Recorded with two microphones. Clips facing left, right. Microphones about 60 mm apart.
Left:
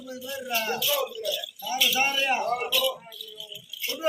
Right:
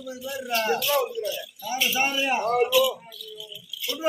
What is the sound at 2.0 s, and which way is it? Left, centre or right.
Speech, centre.